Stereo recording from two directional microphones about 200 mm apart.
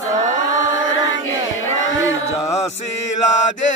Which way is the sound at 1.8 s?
75° left (ahead or behind).